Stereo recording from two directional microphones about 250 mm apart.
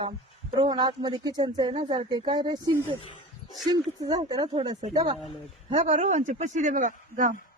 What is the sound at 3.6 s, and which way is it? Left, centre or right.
A woman's voice, centre.